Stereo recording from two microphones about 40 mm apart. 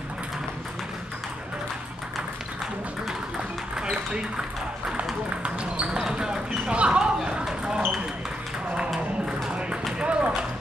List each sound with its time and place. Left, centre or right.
3.7 s music: centre
5.4 s basketball bounce: right
6.1 s clip-clop: centre
7.4 s basketball bounce: centre
9.5 s clip-clop: right
9.9 s ping: right